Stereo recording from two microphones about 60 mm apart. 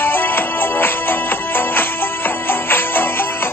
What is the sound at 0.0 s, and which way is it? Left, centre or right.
Music, left.